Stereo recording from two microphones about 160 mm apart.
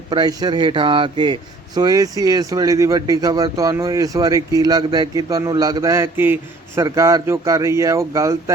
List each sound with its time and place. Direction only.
0.1 s a man's voice: 25° right (ahead or behind)